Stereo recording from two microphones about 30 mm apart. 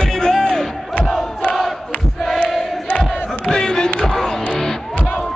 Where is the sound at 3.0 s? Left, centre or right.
Centre.